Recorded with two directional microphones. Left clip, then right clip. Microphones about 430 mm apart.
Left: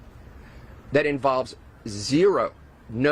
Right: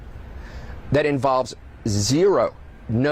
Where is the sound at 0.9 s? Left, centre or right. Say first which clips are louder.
Right 2 dB; right.